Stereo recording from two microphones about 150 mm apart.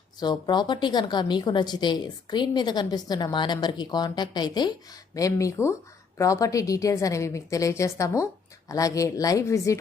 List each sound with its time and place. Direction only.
0.2 s a woman's voice: 30° left (ahead or behind)